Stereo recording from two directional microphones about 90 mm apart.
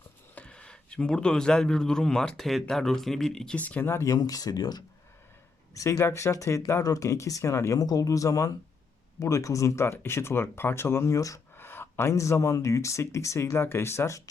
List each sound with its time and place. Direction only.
0.3 s speech: 10° left (ahead or behind)
3.6 s speech: 20° left (ahead or behind); by 4.8 s 45° left (ahead or behind)
5.7 s speech: 35° left (ahead or behind)
11.5 s speech: 25° left (ahead or behind)